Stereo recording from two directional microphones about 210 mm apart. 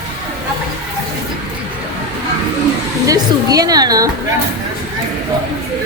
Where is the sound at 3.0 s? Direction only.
15° right (ahead or behind).